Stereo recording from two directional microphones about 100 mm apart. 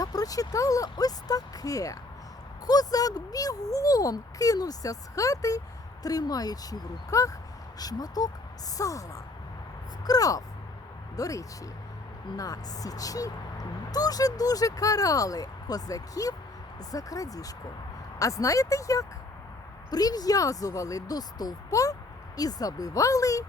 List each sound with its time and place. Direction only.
0.0 s speech: 40° left (ahead or behind)